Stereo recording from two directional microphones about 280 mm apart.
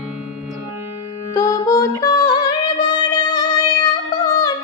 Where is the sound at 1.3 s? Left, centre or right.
Centre.